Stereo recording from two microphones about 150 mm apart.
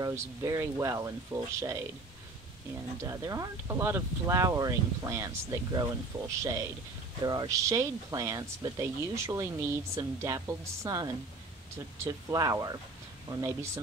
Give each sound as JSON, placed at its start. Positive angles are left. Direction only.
{"t": 0.0, "sound": "speech", "side_deg": -20}
{"t": 3.1, "sound": "speech", "side_deg": -25}